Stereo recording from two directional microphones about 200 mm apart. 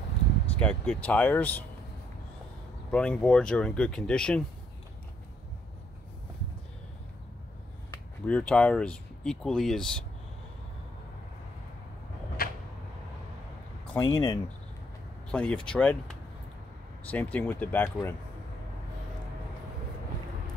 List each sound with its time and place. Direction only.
0.6 s speech: 5° left (ahead or behind)
2.9 s speech: 5° left (ahead or behind)
8.3 s speech: 5° left (ahead or behind)
12.4 s a sound: 50° left (ahead or behind)
13.9 s speech: 20° left (ahead or behind)
15.3 s speech: 5° left (ahead or behind)